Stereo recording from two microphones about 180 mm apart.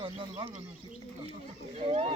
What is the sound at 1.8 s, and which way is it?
Speech, 30° right (ahead or behind).